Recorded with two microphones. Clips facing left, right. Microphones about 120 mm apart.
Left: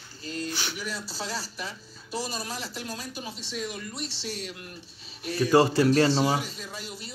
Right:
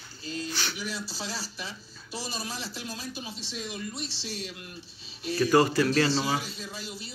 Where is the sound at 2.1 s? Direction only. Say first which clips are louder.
Left 3 dB; 30° right (ahead or behind).